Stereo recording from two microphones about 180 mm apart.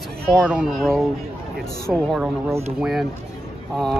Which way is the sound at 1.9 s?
Centre (ahead or behind).